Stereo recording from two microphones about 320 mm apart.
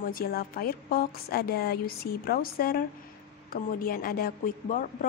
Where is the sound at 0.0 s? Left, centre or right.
Left.